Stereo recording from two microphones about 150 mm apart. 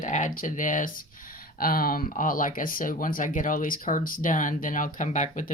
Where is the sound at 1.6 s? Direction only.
75° left (ahead or behind).